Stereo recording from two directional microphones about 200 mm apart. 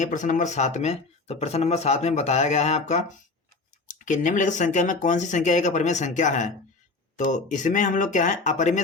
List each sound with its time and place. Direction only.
0.0 s speech: 40° left (ahead or behind)